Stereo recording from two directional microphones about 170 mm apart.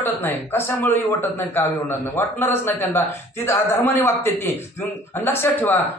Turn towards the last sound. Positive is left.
turn(degrees=10)  # may be behind; listen again after turning